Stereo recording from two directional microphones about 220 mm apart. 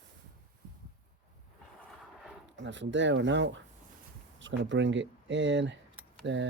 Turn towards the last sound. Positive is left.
turn(degrees=-55)  # may be behind; listen again after turning